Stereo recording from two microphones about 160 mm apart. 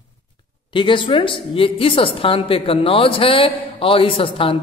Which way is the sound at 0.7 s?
30° left (ahead or behind).